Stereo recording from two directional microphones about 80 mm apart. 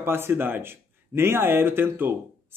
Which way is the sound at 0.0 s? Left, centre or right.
Right.